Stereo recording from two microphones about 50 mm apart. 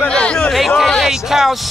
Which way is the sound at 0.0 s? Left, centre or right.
Centre.